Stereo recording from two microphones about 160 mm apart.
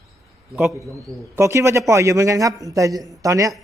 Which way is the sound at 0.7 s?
20° right (ahead or behind).